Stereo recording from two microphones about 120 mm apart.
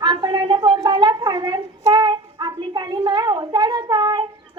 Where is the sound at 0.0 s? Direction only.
40° right (ahead or behind).